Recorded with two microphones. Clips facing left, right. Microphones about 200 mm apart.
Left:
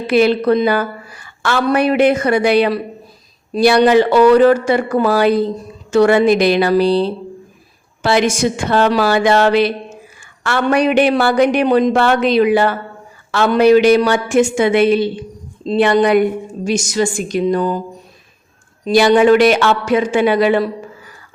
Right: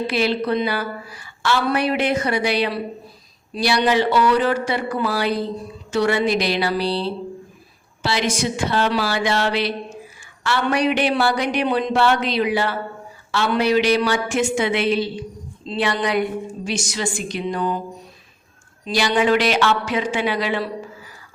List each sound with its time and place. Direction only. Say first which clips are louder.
0.1 s a woman's voice: left 12 dB; 50° left (ahead or behind)
18.9 s a woman's voice: left 9 dB; 50° left (ahead or behind)